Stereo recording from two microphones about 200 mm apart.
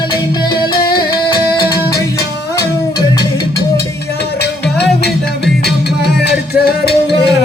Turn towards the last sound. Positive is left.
turn(degrees=50)  # may be behind; listen again after turning